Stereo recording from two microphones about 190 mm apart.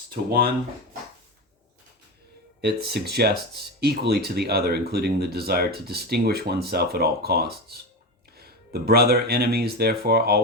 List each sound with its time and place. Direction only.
0.3 s speech: 55° right (ahead or behind)
2.6 s speech: 55° right (ahead or behind)